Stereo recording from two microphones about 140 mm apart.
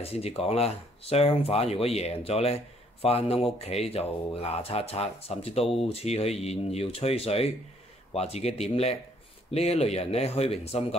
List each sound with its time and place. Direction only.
0.1 s speech: 45° left (ahead or behind)